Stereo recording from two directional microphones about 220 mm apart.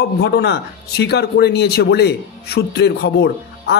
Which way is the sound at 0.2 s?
50° left (ahead or behind).